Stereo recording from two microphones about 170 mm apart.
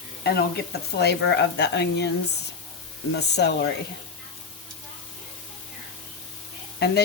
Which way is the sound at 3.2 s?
80° left.